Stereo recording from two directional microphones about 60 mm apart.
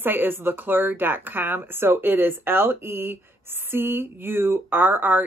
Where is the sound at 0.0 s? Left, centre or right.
Right.